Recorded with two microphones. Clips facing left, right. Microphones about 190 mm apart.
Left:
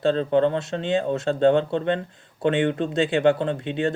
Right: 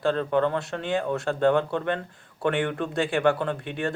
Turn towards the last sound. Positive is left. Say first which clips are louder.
# left 4 dB
turn(degrees=20)  # may be behind; listen again after turning